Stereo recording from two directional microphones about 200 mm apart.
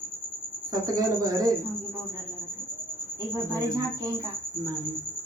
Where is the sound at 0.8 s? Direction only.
15° right (ahead or behind).